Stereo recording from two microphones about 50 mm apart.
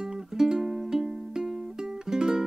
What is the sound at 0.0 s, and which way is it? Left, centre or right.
Music, centre.